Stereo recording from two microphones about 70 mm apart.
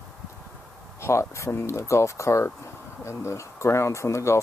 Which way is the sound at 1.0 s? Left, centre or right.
Left.